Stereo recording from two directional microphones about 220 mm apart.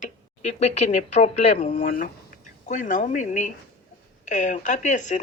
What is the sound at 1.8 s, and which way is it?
Speech, 40° left (ahead or behind).